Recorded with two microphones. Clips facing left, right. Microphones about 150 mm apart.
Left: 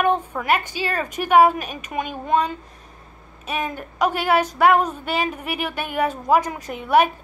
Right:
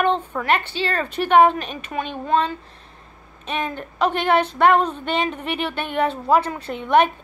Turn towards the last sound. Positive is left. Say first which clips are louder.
# even
turn(degrees=10)  # may be behind; listen again after turning